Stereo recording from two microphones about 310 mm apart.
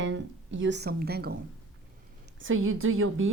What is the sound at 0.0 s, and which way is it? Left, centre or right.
Speech, right.